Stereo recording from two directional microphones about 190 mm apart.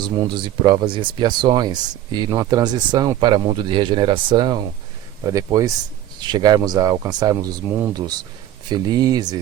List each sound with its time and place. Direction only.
0.0 s speech: 25° right (ahead or behind)